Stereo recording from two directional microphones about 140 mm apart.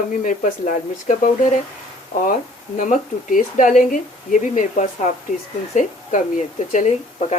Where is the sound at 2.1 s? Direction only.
50° left (ahead or behind).